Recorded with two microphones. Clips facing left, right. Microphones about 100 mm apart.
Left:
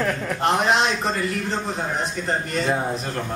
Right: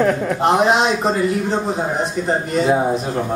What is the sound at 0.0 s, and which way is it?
Speech, 15° right (ahead or behind).